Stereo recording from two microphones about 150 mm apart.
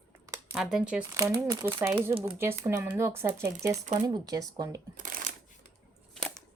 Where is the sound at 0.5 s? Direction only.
5° right (ahead or behind).